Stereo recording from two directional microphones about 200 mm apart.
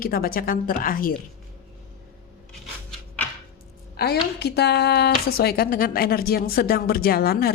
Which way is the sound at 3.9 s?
55° left (ahead or behind).